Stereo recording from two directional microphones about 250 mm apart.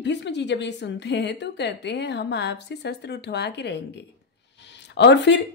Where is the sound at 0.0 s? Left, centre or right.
Left.